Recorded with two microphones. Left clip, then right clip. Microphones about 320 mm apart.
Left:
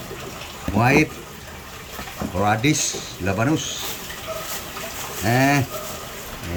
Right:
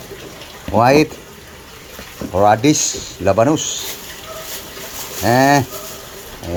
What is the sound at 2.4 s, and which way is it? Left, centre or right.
Speech, centre.